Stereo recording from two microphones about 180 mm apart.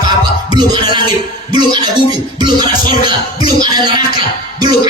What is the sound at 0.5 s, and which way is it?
Music, 25° right (ahead or behind).